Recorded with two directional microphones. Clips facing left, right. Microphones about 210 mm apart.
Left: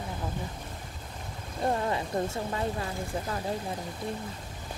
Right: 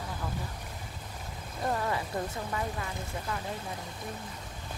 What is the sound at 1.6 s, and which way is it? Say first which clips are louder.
Speech: left 3 dB; 25° left (ahead or behind).